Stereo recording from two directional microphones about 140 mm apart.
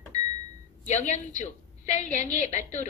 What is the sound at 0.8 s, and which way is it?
A woman's voice, 60° left (ahead or behind).